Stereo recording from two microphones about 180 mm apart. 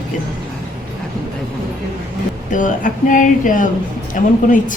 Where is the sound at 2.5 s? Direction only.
45° left (ahead or behind).